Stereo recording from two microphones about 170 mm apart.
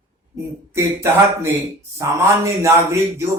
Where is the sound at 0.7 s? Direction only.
15° right (ahead or behind).